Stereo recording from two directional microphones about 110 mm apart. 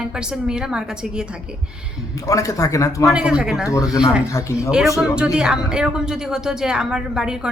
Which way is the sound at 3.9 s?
5° right (ahead or behind).